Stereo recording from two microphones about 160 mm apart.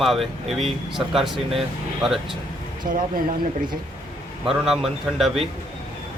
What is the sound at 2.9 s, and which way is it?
Speech, 60° right (ahead or behind).